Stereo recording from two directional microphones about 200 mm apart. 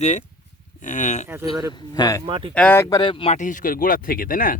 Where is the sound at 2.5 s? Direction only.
10° left (ahead or behind); by 4.6 s 45° left (ahead or behind).